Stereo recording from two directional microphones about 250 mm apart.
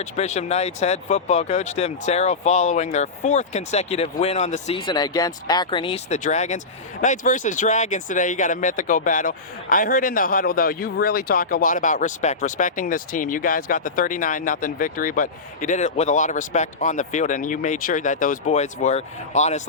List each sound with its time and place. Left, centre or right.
0.0 s speech: left